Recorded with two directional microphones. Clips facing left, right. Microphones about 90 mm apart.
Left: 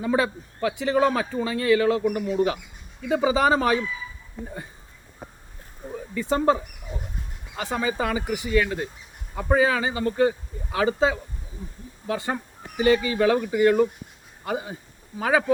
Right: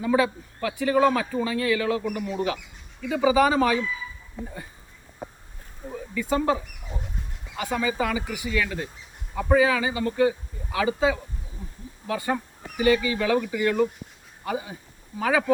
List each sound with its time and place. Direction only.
0.0 s a man's voice: 30° left (ahead or behind)
6.1 s a man's voice: 35° left (ahead or behind)
9.6 s a man's voice: 35° left (ahead or behind)